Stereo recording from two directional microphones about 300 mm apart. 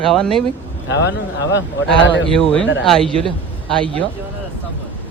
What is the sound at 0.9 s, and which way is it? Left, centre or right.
Speech, left.